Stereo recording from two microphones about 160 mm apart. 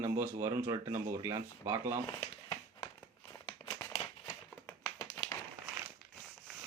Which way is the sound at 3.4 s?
20° left (ahead or behind).